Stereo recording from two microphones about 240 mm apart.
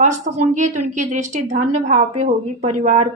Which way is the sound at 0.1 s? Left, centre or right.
Right.